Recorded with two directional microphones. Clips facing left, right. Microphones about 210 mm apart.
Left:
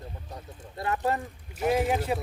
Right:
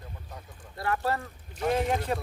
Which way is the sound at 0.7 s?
20° left (ahead or behind).